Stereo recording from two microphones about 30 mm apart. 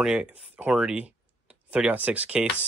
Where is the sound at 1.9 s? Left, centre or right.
Right.